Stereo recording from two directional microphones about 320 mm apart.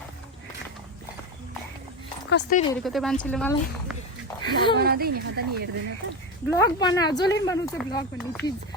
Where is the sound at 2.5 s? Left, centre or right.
Left.